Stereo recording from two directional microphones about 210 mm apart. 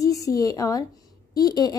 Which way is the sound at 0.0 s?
15° left (ahead or behind).